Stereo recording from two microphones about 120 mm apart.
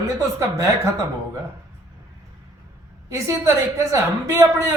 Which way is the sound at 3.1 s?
25° right (ahead or behind).